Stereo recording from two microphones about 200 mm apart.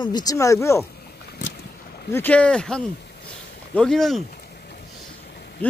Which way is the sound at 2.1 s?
10° left (ahead or behind).